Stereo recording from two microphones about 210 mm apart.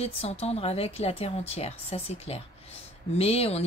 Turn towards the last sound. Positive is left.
turn(degrees=30)  # may be behind; listen again after turning